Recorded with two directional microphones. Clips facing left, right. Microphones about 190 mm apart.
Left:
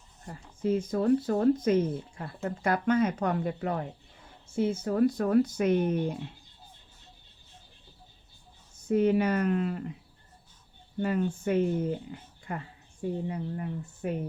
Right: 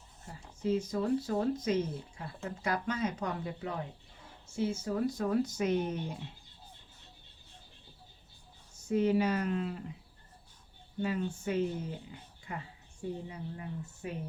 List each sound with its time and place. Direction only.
0.3 s speech: 55° left (ahead or behind)
8.9 s speech: 55° left (ahead or behind)
11.0 s speech: 55° left (ahead or behind)